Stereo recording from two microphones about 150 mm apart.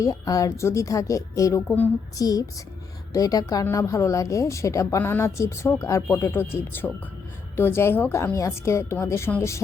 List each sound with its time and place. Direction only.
0.0 s a woman's voice: 20° left (ahead or behind)
2.1 s a woman's voice: 25° left (ahead or behind)